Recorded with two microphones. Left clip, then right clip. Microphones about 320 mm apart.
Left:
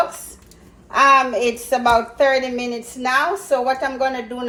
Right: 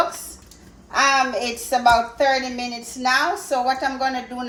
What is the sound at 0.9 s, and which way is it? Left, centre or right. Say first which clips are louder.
A woman's voice: left 5 dB; left.